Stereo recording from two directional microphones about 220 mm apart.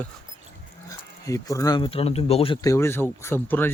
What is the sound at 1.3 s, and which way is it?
Speech, 15° left (ahead or behind).